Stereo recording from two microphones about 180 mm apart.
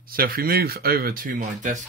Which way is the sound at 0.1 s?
55° right (ahead or behind).